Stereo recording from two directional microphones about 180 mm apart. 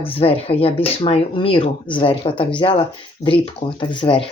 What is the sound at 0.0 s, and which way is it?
Speech, 30° left (ahead or behind).